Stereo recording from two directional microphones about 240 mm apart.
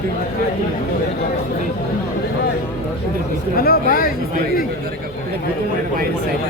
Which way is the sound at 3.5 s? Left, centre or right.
Left.